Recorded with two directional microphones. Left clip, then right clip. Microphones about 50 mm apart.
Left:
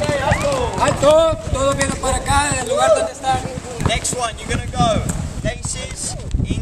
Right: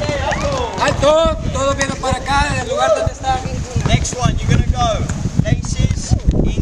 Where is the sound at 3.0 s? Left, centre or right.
Centre.